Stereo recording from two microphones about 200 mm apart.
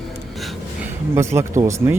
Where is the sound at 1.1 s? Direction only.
15° right (ahead or behind).